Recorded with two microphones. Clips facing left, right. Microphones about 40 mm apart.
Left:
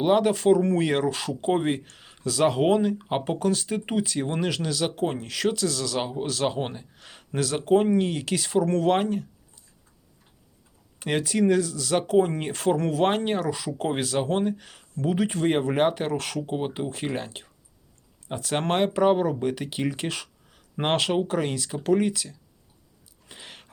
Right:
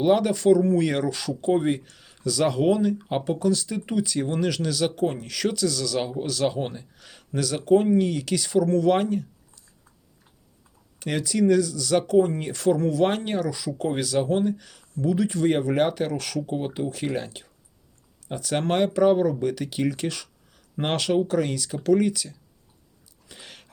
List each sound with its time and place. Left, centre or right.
0.0 s speech: left
0.3 s speech: left; by 4.9 s centre
4.9 s speech: left
8.9 s speech: left
11.0 s speech: left
13.0 s speech: left
13.9 s speech: left
23.3 s a sound: centre